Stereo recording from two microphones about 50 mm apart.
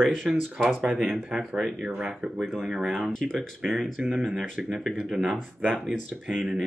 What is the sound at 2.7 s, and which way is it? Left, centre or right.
Speech, centre.